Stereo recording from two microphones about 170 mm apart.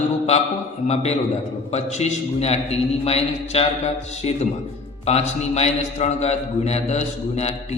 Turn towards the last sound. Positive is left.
turn(degrees=40)  # may be behind; listen again after turning